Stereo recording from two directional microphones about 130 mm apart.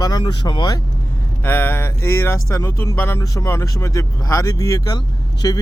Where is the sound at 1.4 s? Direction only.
20° left (ahead or behind).